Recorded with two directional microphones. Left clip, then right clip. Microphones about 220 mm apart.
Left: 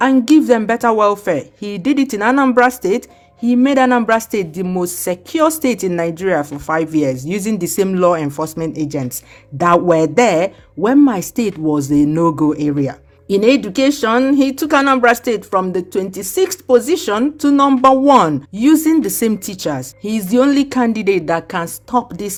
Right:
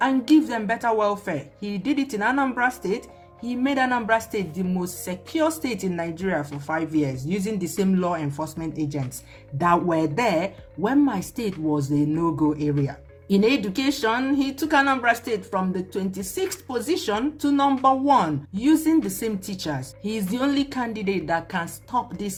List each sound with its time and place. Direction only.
0.0 s a woman's voice: 50° left (ahead or behind)